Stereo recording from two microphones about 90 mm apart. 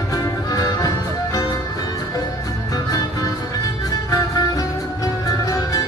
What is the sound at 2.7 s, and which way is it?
Music, 45° left (ahead or behind).